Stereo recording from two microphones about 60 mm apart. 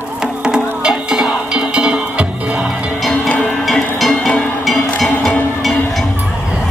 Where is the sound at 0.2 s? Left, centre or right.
Centre.